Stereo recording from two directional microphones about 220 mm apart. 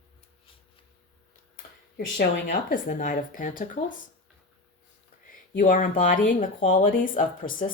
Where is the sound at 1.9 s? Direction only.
40° left (ahead or behind).